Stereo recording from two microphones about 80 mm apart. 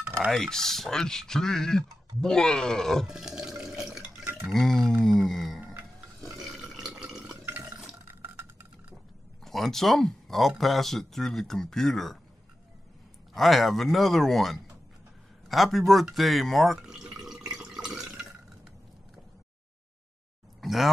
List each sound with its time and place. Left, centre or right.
0.3 s speech: centre
3.1 s water: centre
4.1 s stir: right
4.5 s speech: centre
4.9 s a sound: centre
6.4 s water: centre
8.1 s a sound: right
9.4 s speech: centre
13.3 s speech: centre
15.9 s drip: centre
20.6 s roaring cats: centre